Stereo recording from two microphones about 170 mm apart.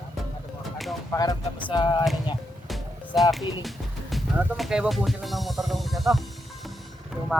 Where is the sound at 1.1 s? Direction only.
20° left (ahead or behind).